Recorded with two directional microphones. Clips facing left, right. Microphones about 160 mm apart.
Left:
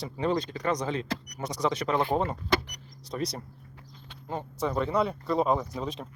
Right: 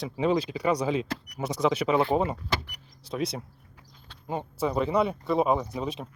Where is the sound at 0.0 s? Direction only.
5° right (ahead or behind).